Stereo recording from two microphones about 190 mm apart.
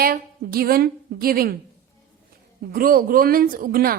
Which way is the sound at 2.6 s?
50° right (ahead or behind).